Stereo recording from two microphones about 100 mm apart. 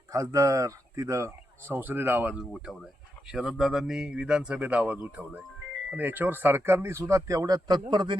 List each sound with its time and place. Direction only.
0.1 s speech: 35° right (ahead or behind)
1.7 s speech: 20° right (ahead or behind)
2.6 s speech: 5° right (ahead or behind); by 8.1 s 40° right (ahead or behind)